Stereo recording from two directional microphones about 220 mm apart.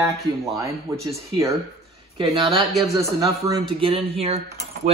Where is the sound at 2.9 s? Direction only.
15° right (ahead or behind).